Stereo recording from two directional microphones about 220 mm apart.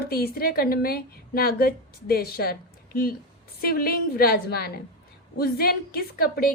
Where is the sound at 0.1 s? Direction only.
45° left (ahead or behind).